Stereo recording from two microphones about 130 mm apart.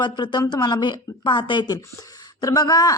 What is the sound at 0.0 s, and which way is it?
Speech, 35° left (ahead or behind).